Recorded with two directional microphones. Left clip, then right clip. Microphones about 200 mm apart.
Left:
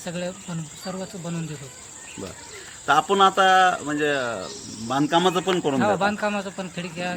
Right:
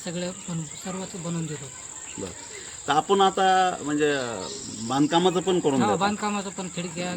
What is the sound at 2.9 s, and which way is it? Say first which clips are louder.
Speech: left 3 dB; 5° right (ahead or behind).